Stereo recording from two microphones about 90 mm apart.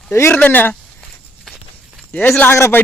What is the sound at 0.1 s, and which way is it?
Speech, 30° left (ahead or behind).